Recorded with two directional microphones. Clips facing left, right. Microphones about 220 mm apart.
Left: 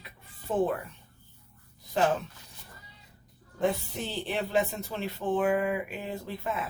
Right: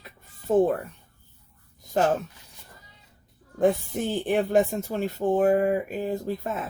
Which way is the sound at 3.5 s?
50° right (ahead or behind).